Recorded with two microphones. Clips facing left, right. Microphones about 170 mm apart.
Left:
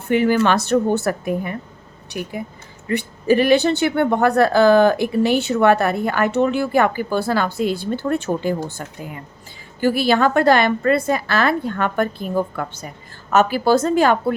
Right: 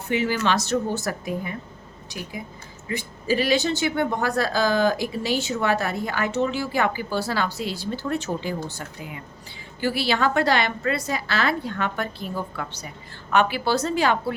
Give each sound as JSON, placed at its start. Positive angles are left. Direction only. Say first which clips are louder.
{"t": 0.1, "sound": "a woman's voice", "louder": "left 7 dB", "side_deg": 55}